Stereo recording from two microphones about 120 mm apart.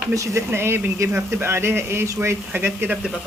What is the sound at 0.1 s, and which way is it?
Speech, 25° right (ahead or behind).